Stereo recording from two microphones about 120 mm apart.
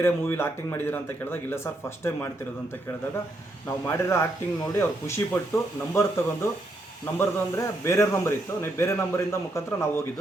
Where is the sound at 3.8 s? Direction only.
20° left (ahead or behind).